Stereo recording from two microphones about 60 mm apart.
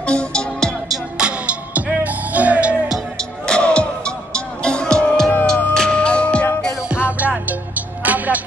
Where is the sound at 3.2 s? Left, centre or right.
Centre.